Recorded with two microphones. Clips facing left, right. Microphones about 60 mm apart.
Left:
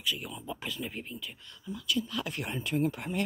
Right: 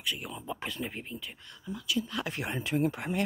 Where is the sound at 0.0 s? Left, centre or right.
Right.